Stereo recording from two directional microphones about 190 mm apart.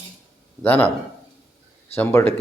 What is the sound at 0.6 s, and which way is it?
Speech, 10° left (ahead or behind).